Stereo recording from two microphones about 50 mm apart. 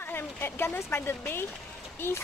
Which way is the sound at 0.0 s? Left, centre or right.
Left.